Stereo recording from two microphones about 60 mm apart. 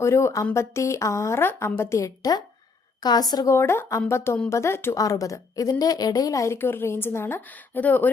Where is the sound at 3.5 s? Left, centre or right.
Left.